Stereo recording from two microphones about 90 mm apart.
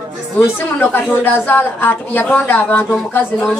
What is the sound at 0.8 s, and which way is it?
A woman's voice, 20° left (ahead or behind).